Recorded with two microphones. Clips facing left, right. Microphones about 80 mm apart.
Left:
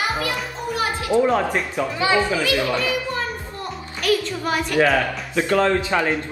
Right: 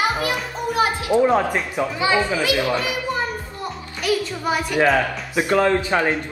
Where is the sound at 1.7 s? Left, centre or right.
Centre.